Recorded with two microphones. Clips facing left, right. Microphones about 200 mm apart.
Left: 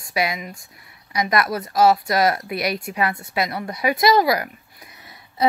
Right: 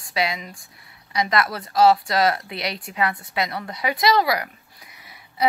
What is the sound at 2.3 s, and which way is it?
Speech, 25° right (ahead or behind).